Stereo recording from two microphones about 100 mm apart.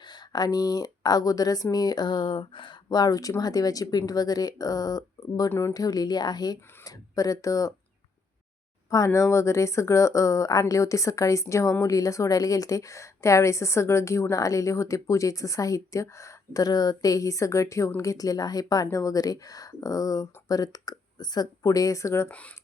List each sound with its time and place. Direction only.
0.0 s speech: 45° left (ahead or behind)
5.5 s speech: 30° left (ahead or behind)
8.9 s speech: 35° left (ahead or behind)
22.3 s speech: 15° left (ahead or behind)